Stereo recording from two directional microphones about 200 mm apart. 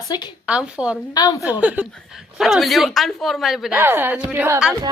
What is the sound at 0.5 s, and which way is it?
A woman's voice, 5° right (ahead or behind).